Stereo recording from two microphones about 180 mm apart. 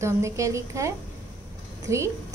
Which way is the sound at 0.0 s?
15° right (ahead or behind).